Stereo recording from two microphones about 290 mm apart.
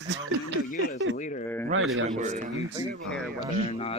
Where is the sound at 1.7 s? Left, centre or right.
Right.